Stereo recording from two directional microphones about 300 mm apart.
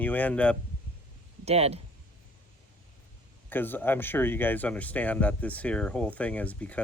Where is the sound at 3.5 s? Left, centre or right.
Centre.